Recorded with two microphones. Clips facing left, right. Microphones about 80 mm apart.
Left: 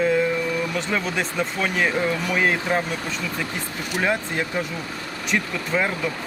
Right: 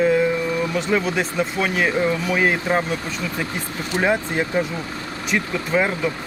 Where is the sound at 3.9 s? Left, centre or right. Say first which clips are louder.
Right 3 dB; centre.